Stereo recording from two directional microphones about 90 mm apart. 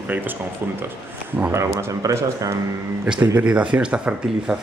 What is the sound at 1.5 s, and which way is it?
Speech, 30° right (ahead or behind).